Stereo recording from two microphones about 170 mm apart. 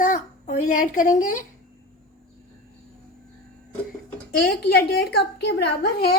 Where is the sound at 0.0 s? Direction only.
50° left (ahead or behind).